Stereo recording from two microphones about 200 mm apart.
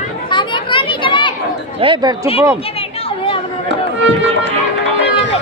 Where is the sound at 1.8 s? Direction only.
20° right (ahead or behind).